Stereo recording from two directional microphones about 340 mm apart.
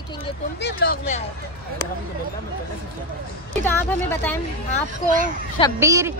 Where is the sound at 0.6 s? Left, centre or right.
Left.